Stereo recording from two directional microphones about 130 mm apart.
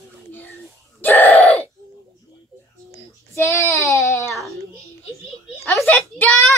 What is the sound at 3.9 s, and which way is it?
Baby cry, 25° left (ahead or behind).